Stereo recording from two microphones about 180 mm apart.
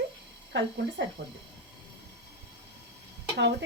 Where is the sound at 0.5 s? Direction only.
75° right (ahead or behind).